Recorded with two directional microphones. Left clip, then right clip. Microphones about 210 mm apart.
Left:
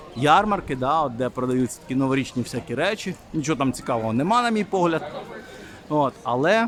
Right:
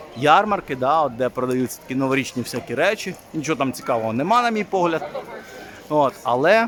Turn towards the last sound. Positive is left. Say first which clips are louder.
# right 4 dB
turn(degrees=0)  # may be behind; listen again after turning